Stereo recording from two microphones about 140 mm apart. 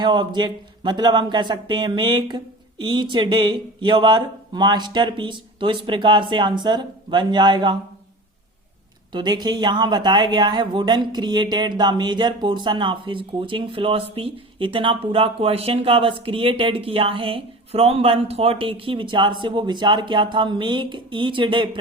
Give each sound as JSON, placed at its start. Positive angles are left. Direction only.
{"t": 0.0, "sound": "speech", "side_deg": -35}
{"t": 9.1, "sound": "speech", "side_deg": -30}